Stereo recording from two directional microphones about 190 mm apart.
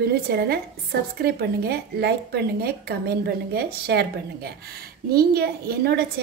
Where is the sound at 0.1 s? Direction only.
55° right (ahead or behind).